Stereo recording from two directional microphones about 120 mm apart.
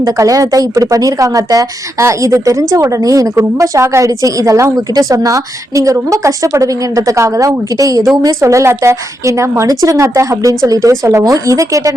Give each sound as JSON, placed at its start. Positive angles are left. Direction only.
{"t": 0.0, "sound": "a woman's voice", "side_deg": -25}